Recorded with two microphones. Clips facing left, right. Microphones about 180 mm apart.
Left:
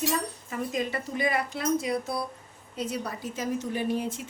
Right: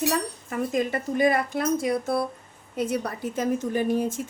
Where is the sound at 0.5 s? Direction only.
50° right (ahead or behind).